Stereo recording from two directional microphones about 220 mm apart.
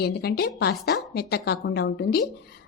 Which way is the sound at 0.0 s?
45° left (ahead or behind).